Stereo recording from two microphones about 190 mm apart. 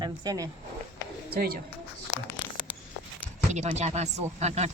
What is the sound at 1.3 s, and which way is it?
Speech, 55° right (ahead or behind).